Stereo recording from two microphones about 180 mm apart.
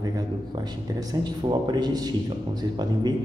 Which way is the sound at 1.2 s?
25° right (ahead or behind).